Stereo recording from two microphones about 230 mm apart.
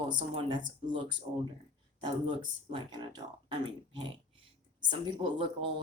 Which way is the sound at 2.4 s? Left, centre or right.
Centre.